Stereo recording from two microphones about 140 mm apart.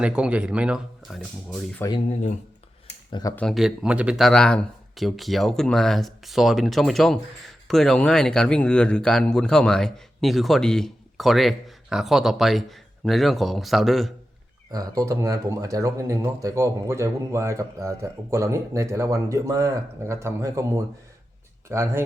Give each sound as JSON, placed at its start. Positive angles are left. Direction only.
{"t": 0.0, "sound": "a man's voice", "side_deg": -10}
{"t": 3.1, "sound": "speech", "side_deg": 30}
{"t": 3.3, "sound": "a man's voice", "side_deg": 0}
{"t": 14.7, "sound": "speech", "side_deg": -25}